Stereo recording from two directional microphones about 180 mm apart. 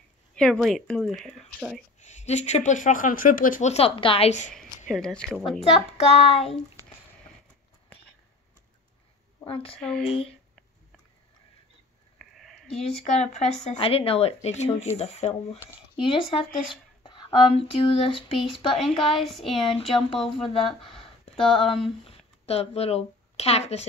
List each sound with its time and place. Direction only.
0.4 s speech: centre (ahead or behind)
2.0 s speech: 40° left (ahead or behind)
4.9 s speech: 5° left (ahead or behind)
5.6 s speech: 35° left (ahead or behind)
9.5 s speech: 30° left (ahead or behind)
9.8 s speech: 5° left (ahead or behind)
12.2 s sheep: centre (ahead or behind)
12.8 s speech: 35° left (ahead or behind)
18.7 s speech: centre (ahead or behind)
18.9 s a woman's voice: 30° left (ahead or behind)
19.2 s speech: centre (ahead or behind)
19.6 s speech: 30° left (ahead or behind)
21.6 s speech: centre (ahead or behind)
22.0 s speech: 35° left (ahead or behind)